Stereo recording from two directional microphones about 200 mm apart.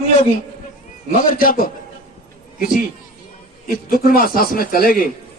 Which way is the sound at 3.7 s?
50° left (ahead or behind).